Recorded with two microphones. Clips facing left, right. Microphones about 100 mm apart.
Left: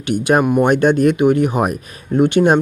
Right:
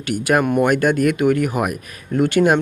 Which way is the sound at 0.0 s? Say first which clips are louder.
Left 3 dB; 20° left (ahead or behind).